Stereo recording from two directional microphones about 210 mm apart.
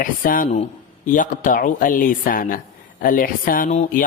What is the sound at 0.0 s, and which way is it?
Speech, 40° left (ahead or behind).